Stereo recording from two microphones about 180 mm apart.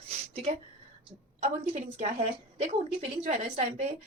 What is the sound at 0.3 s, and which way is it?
Speech, 35° right (ahead or behind).